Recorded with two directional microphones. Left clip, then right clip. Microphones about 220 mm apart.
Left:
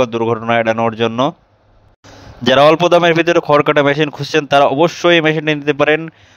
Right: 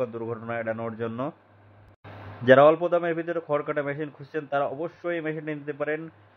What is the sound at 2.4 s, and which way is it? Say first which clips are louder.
A man's voice: left 7 dB; 45° left (ahead or behind).